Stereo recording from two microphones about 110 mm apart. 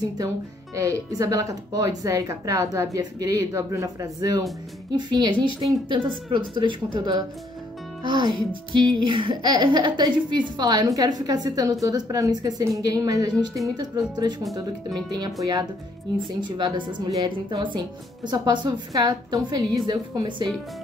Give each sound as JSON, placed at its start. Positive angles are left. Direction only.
{"t": 0.7, "sound": "speech", "side_deg": -30}
{"t": 4.9, "sound": "a woman's voice", "side_deg": -40}